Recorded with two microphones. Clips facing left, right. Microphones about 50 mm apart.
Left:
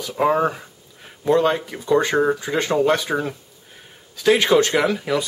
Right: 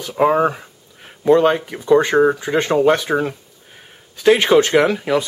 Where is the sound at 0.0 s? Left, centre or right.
Centre.